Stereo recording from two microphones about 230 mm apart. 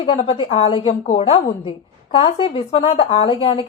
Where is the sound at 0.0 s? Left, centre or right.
Left.